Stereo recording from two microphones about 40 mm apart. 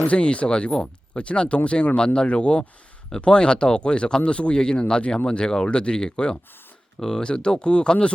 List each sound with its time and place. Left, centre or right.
0.1 s speech: left